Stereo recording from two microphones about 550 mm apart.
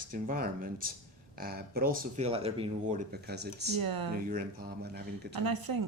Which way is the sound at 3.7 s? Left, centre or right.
Right.